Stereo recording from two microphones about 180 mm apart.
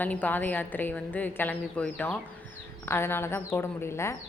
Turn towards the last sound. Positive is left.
turn(degrees=15)  # may be behind; listen again after turning